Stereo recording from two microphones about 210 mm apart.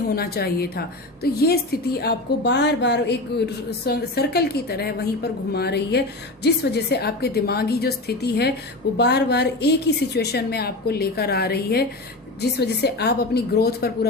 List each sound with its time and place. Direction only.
0.2 s a woman's voice: 45° left (ahead or behind)